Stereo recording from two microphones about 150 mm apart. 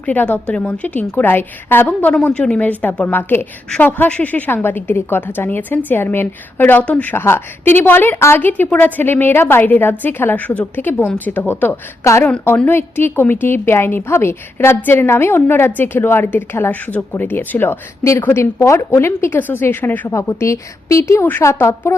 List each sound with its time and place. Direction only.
0.0 s a woman's voice: 10° left (ahead or behind)